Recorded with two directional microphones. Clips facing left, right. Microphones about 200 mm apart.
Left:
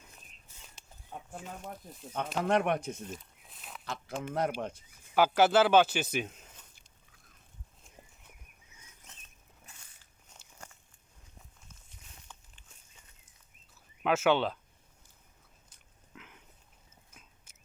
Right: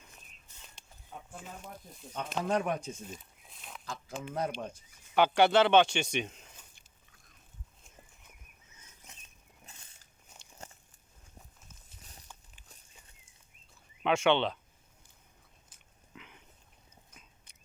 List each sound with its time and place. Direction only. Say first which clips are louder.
0.8 s a sound: left 1 dB; 5° left (ahead or behind)
2.1 s speech: left 3 dB; 60° left (ahead or behind)
3.1 s a sound: left 3 dB; centre (ahead or behind)
3.8 s speech: left 3 dB; 70° left (ahead or behind)
5.1 s speech: even; 5° left (ahead or behind)
6.7 s biting: left 1 dB; centre (ahead or behind)
10.3 s walk: right 1 dB; 10° right (ahead or behind)
14.0 s speech: even; 5° left (ahead or behind)
16.1 s a sound: even; centre (ahead or behind)
17.2 s chewing: even; 5° left (ahead or behind)